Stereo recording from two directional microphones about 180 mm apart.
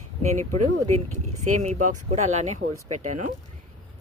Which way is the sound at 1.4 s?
40° right (ahead or behind).